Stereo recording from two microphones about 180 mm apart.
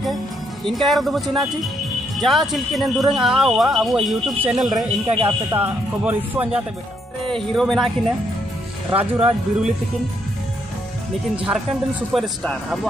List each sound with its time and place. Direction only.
0.7 s speech: centre (ahead or behind)
5.0 s speech: 30° right (ahead or behind)
5.5 s speech: 10° right (ahead or behind)
7.2 s speech: centre (ahead or behind)
8.9 s speech: 10° right (ahead or behind)
11.3 s speech: 5° right (ahead or behind)